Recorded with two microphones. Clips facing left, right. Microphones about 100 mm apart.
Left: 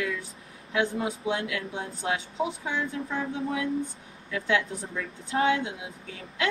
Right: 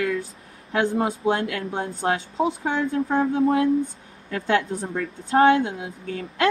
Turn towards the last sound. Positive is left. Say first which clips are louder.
# right 8 dB
turn(degrees=-40)  # may be behind; listen again after turning